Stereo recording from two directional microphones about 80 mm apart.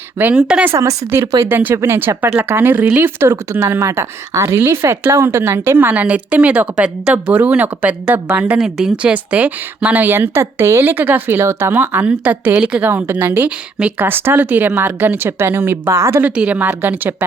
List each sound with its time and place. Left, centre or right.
0.2 s speech: right
0.8 s a woman's voice: right
1.5 s a woman's voice: right
8.5 s a woman's voice: centre
12.9 s speech: right
16.2 s speech: centre